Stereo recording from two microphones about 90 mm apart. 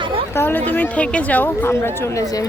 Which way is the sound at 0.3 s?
20° left (ahead or behind).